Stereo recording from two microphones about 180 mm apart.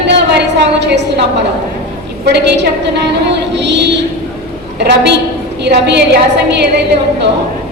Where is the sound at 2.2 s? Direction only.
70° right (ahead or behind).